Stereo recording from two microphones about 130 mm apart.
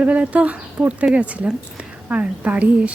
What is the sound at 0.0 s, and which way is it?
A woman's voice, 10° right (ahead or behind).